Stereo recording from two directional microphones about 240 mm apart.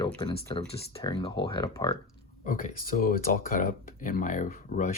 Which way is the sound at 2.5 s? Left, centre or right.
Left.